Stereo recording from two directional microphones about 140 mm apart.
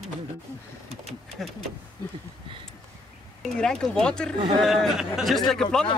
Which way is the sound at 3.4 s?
5° left (ahead or behind).